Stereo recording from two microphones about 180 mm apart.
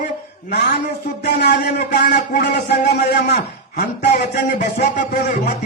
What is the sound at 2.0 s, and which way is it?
Speech, 45° left (ahead or behind).